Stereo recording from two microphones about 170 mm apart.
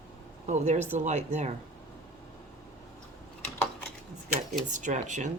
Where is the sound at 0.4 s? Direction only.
45° right (ahead or behind).